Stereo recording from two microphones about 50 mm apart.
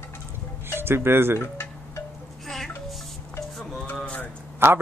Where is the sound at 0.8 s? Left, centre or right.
Right.